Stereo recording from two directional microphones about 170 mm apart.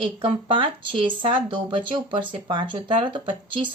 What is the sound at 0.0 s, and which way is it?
Speech, 30° right (ahead or behind).